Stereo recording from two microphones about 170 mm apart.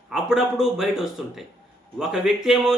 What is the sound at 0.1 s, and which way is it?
Speech, 5° right (ahead or behind).